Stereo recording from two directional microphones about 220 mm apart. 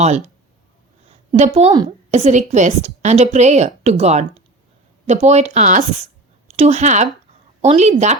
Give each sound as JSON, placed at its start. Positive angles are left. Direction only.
{"t": 1.3, "sound": "a woman's voice", "side_deg": -30}